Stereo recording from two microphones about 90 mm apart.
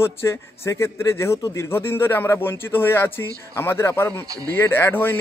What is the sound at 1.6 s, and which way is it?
Speech, 25° left (ahead or behind).